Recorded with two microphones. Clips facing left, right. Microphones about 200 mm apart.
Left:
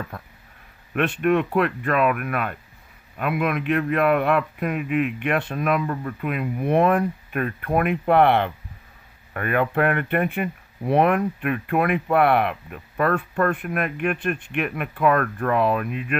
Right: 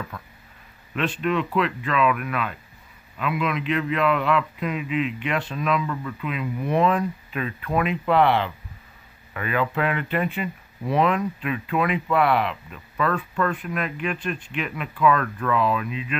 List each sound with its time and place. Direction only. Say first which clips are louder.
0.9 s a man's voice: left 4 dB; 55° left (ahead or behind)